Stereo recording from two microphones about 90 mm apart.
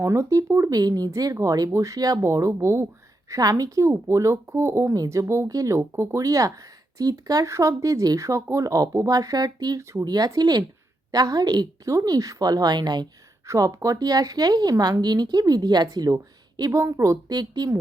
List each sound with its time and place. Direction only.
0.0 s speech: 30° right (ahead or behind)
0.8 s a woman's voice: 45° right (ahead or behind)
13.5 s a woman's voice: 35° right (ahead or behind)
17.2 s a woman's voice: 50° right (ahead or behind)